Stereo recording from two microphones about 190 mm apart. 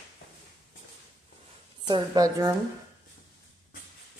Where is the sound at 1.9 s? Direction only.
20° right (ahead or behind).